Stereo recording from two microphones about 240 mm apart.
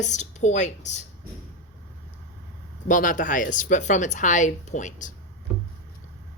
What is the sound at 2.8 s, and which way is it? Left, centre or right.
Speech, left.